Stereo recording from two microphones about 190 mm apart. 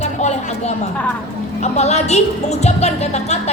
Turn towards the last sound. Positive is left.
turn(degrees=35)  # may be behind; listen again after turning